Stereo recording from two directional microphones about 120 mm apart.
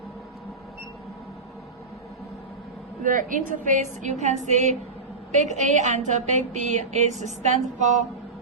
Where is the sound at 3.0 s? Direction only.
90° right.